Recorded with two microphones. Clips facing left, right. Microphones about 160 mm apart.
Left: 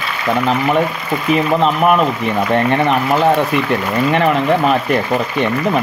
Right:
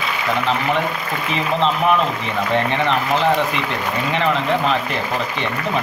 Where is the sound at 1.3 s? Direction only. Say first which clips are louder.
Left 5 dB; 50° left (ahead or behind).